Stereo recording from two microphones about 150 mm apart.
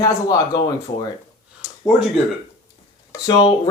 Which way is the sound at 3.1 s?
25° left (ahead or behind).